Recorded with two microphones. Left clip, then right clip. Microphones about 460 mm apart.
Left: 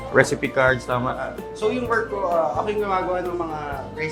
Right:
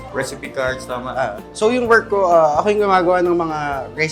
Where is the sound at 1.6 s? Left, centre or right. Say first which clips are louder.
Right 8 dB; right.